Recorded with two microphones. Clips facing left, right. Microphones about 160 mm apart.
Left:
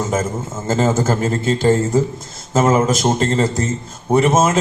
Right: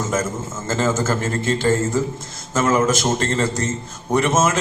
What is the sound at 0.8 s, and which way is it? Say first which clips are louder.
Speech: left 3 dB; 35° left (ahead or behind).